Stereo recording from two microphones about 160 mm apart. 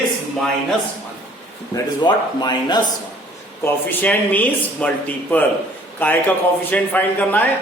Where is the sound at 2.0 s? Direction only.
25° left (ahead or behind).